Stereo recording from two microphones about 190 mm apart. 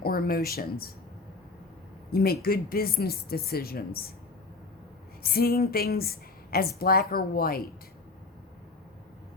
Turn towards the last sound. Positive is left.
turn(degrees=50)  # may be behind; listen again after turning